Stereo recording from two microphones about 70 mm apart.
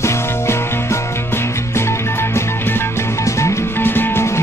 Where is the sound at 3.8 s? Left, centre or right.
Left.